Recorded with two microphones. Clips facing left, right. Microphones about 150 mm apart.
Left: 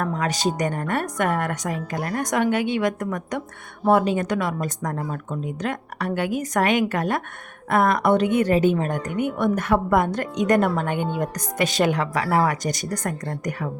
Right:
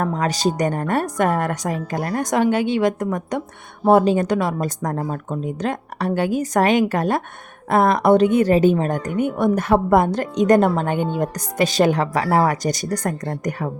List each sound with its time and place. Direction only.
0.0 s a woman's voice: 35° right (ahead or behind)